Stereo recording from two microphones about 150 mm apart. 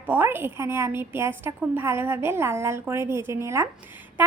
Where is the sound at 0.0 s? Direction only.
10° right (ahead or behind).